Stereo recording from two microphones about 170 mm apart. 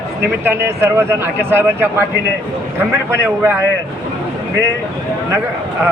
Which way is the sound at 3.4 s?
10° right (ahead or behind).